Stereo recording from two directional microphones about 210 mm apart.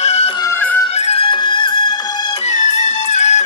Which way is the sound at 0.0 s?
30° left (ahead or behind).